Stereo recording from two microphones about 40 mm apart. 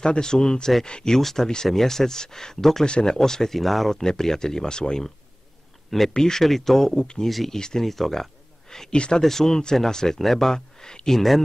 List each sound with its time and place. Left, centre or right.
0.0 s speech: centre
1.1 s speech: centre
2.8 s speech: left
3.2 s speech: centre
3.9 s speech: centre
5.9 s speech: centre
7.0 s speech: left
7.2 s speech: centre
7.5 s speech: centre
8.9 s speech: left
9.2 s speech: centre
10.5 s speech: centre
11.1 s speech: centre